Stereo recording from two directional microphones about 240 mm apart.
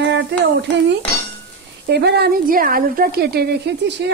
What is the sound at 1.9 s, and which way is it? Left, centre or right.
Speech, right.